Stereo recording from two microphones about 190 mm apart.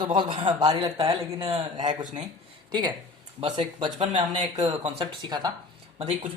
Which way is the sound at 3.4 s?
25° right (ahead or behind).